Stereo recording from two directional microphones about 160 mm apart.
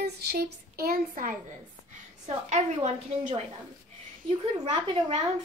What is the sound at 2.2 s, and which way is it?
A woman's voice, 45° right (ahead or behind).